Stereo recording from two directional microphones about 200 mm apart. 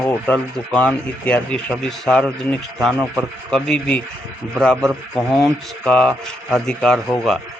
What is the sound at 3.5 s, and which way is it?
A man's voice, 5° left (ahead or behind).